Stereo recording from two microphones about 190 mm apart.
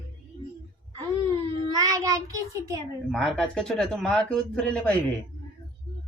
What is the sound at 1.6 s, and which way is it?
Child singing, 20° right (ahead or behind).